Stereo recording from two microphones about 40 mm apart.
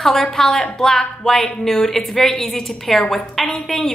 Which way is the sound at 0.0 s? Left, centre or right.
Centre.